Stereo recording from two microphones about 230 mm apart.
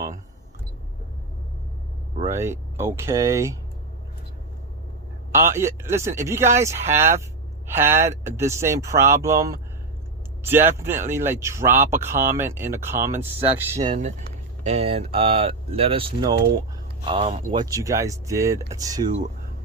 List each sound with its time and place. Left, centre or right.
2.2 s speech: centre
5.3 s speech: centre
13.4 s speech: right